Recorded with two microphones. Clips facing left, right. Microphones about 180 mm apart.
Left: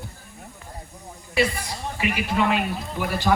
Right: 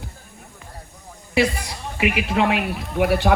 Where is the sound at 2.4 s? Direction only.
75° right (ahead or behind).